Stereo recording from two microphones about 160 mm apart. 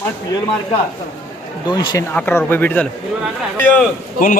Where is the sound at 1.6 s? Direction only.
25° left (ahead or behind).